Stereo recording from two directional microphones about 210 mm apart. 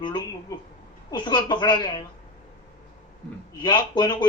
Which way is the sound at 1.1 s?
20° left (ahead or behind).